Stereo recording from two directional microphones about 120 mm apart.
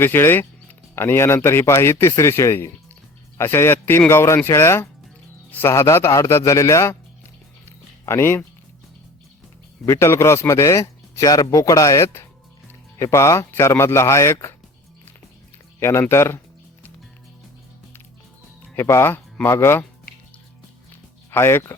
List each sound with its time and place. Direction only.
0.0 s speech: 20° left (ahead or behind)
8.0 s speech: 20° left (ahead or behind)
9.8 s speech: 20° left (ahead or behind)
15.8 s speech: 20° left (ahead or behind)
18.8 s speech: 20° left (ahead or behind)
21.2 s speech: 20° left (ahead or behind)